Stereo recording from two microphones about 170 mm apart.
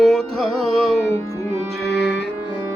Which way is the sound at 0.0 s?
5° left (ahead or behind).